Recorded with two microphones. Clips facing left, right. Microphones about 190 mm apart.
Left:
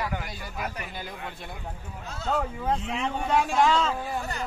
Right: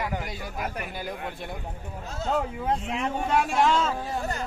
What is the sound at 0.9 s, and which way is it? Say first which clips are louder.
Speech: right 4 dB; 10° right (ahead or behind).